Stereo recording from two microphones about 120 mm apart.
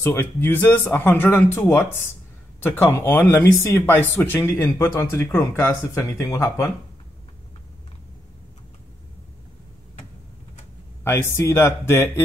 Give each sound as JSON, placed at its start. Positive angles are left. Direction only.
{"t": 0.0, "sound": "speech", "side_deg": 20}
{"t": 11.1, "sound": "speech", "side_deg": 20}